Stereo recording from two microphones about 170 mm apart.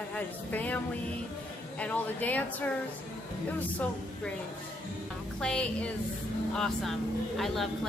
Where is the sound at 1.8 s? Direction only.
10° left (ahead or behind).